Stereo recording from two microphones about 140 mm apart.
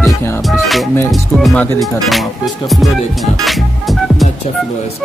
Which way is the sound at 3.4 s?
Centre (ahead or behind).